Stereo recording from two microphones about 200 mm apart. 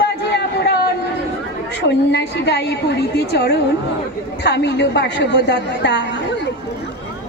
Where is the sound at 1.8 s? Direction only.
60° left (ahead or behind).